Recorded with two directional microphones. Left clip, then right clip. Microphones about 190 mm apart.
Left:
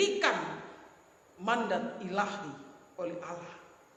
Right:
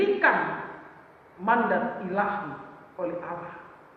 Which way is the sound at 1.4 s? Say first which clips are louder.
Right 7 dB; 60° left (ahead or behind).